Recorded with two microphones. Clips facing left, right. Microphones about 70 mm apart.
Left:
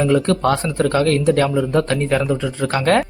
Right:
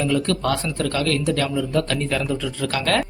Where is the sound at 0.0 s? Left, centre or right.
Left.